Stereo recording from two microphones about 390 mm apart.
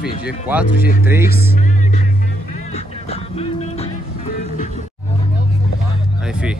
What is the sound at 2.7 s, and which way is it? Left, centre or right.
Music, centre.